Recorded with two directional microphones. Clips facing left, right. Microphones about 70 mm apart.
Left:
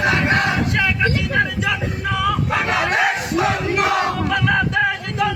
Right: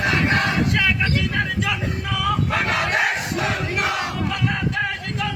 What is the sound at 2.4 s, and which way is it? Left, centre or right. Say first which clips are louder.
Crowd: left 3 dB; centre.